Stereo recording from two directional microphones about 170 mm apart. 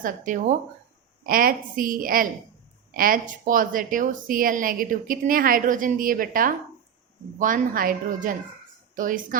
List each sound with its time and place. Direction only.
0.0 s a woman's voice: 50° right (ahead or behind)
1.2 s a woman's voice: 60° right (ahead or behind)